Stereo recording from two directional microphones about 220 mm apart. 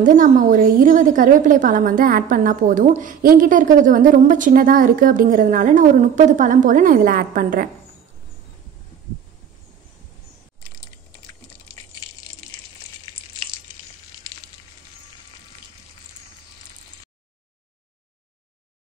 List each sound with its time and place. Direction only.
0.0 s a woman's voice: 35° right (ahead or behind)